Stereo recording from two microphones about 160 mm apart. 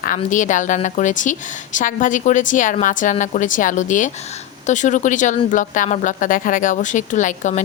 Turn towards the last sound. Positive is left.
turn(degrees=50)  # may be behind; listen again after turning